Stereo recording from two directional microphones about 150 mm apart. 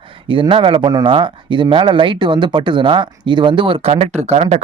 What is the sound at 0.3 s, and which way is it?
Speech, 35° right (ahead or behind).